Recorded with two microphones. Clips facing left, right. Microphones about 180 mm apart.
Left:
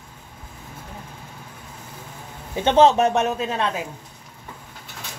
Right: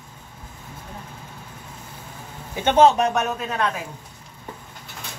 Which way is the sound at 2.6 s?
30° left (ahead or behind).